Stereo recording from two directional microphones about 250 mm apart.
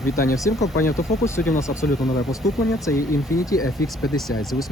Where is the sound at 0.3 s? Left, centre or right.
Centre.